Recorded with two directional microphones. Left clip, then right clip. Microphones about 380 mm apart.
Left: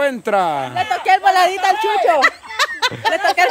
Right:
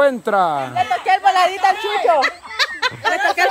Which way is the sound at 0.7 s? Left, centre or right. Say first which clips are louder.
Left 4 dB; left.